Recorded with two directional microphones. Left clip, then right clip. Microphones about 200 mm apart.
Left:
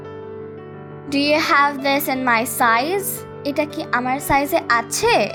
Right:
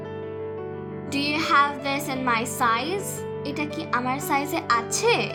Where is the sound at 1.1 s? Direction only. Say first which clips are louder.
Left 5 dB; 25° left (ahead or behind).